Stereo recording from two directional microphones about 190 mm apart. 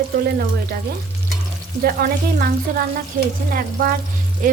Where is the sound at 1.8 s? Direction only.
50° right (ahead or behind).